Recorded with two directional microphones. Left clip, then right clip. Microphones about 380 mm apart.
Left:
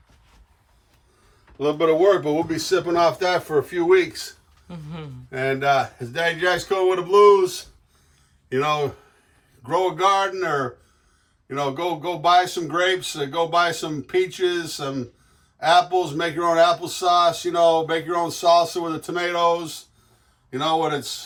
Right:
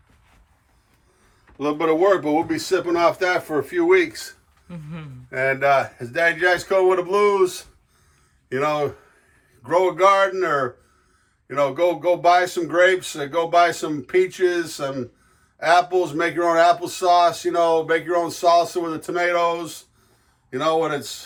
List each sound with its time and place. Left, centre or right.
1.5 s a man's voice: centre